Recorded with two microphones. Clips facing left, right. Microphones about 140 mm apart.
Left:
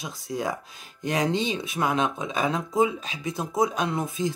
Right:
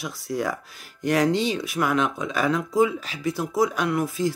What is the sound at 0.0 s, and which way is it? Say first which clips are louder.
Speech: right 2 dB; 20° left (ahead or behind).